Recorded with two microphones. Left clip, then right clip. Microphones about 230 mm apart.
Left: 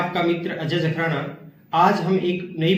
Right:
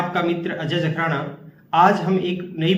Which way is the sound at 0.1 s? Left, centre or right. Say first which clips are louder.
Even; centre.